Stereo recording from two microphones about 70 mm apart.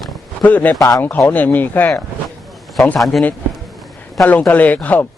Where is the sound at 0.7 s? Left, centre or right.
Left.